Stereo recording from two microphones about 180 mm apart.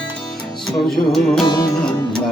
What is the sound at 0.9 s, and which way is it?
Music, centre (ahead or behind).